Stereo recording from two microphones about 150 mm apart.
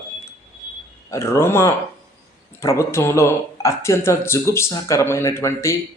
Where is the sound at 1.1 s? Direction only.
20° left (ahead or behind).